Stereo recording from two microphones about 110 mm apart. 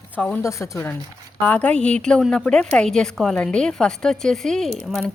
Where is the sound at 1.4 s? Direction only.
10° left (ahead or behind).